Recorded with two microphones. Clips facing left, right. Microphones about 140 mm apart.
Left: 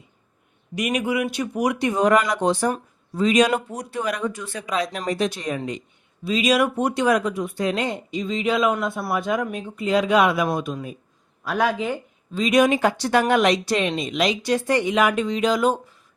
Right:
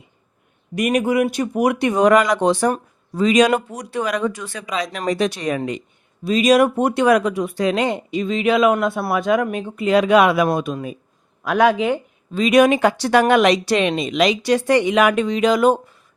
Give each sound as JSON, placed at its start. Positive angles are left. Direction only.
{"t": 0.8, "sound": "speech", "side_deg": -50}
{"t": 6.2, "sound": "speech", "side_deg": -45}